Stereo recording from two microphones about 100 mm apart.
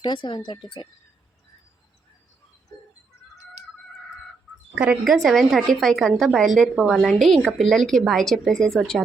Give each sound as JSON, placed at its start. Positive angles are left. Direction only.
{"t": 0.0, "sound": "speech", "side_deg": 50}
{"t": 4.7, "sound": "speech", "side_deg": -10}
{"t": 5.1, "sound": "a woman's voice", "side_deg": 0}